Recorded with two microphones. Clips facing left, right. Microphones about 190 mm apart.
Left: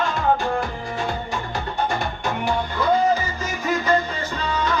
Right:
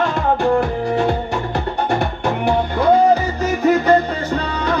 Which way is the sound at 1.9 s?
65° right (ahead or behind).